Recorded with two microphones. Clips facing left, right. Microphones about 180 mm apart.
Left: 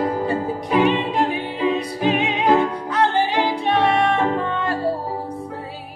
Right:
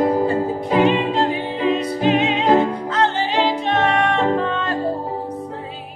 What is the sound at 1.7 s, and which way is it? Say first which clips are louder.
Music: right 3 dB; 15° left (ahead or behind).